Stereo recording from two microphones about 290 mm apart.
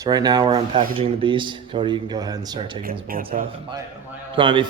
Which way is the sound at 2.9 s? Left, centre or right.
Right.